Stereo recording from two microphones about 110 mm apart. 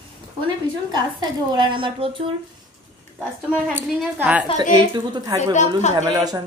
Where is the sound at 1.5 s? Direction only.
45° right (ahead or behind).